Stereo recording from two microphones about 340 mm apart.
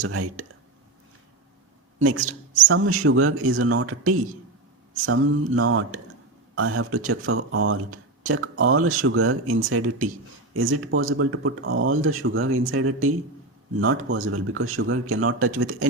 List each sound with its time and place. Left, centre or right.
0.0 s speech: right
2.0 s speech: right